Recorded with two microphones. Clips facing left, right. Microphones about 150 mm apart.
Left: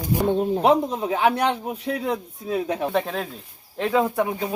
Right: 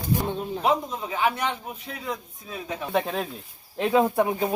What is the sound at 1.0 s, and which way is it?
Speech, 65° left (ahead or behind).